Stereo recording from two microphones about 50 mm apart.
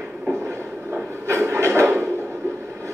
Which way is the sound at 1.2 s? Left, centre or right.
Right.